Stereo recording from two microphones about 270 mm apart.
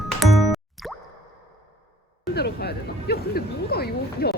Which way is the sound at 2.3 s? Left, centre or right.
Left.